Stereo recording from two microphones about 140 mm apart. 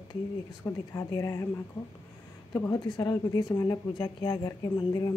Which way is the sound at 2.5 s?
20° left (ahead or behind).